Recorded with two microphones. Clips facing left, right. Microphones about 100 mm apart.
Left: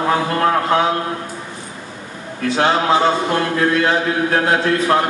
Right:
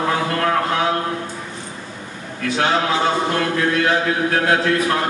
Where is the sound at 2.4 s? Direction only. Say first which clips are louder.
Left 3 dB; 30° left (ahead or behind).